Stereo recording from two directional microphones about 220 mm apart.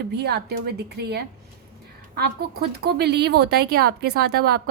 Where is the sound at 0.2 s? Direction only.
45° right (ahead or behind).